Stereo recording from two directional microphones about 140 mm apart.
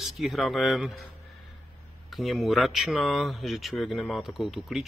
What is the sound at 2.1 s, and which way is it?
Speech, centre (ahead or behind).